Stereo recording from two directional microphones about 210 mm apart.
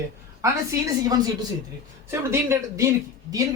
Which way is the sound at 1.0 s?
20° right (ahead or behind).